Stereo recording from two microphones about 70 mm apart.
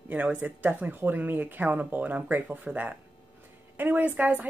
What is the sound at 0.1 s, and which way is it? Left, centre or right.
A woman's voice, right.